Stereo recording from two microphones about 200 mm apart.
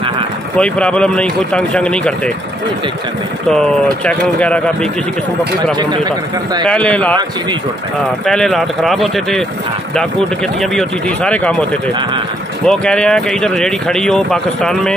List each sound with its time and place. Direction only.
0.6 s speech: 5° left (ahead or behind)
3.4 s speech: 5° left (ahead or behind)
5.8 s a man's voice: 20° right (ahead or behind)
6.6 s a man's voice: 5° left (ahead or behind)
8.3 s speech: centre (ahead or behind)
10.6 s speech: 5° left (ahead or behind)
12.6 s speech: 5° left (ahead or behind)